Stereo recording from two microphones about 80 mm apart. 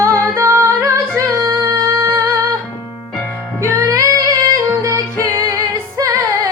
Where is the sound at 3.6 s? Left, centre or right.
Right.